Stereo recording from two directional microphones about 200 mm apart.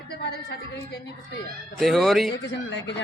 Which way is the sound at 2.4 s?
65° left (ahead or behind).